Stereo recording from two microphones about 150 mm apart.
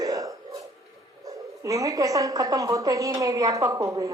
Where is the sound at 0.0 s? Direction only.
20° right (ahead or behind).